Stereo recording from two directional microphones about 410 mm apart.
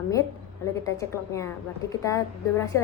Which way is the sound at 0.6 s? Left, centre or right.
Centre.